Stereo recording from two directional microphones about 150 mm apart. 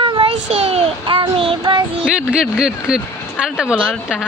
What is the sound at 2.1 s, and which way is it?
Speech, 5° right (ahead or behind).